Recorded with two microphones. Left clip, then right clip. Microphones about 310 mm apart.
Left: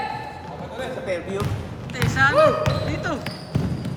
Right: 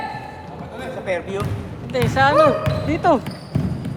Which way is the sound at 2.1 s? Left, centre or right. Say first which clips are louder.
Right 2 dB; centre.